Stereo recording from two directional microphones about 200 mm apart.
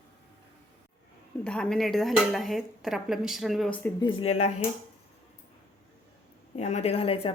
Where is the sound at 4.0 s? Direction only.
25° left (ahead or behind).